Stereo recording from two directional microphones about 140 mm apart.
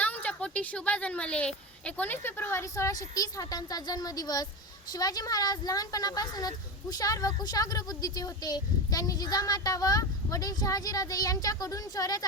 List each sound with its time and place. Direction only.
0.0 s a child's voice: 10° left (ahead or behind)